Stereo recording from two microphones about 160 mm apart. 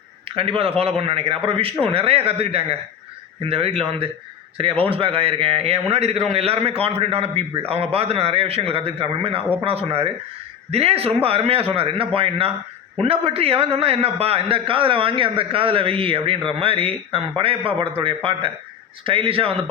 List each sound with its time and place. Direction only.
0.3 s a man's voice: 35° right (ahead or behind)